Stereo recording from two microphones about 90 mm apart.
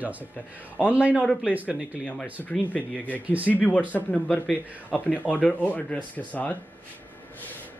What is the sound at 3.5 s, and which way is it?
Speech, 20° left (ahead or behind).